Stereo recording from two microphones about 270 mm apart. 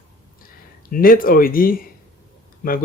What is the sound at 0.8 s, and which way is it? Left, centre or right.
Speech, left.